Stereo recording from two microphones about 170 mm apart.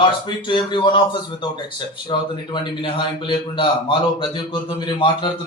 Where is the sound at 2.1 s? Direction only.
25° left (ahead or behind).